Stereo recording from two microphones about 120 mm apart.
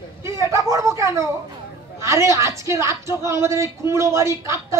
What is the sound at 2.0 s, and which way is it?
A woman's voice, 25° right (ahead or behind).